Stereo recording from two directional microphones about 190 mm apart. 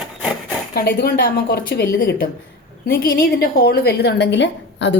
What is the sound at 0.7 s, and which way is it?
A woman's voice, 55° left (ahead or behind).